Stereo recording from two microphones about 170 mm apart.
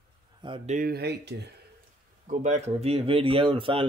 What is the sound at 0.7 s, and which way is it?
Speech, 55° right (ahead or behind).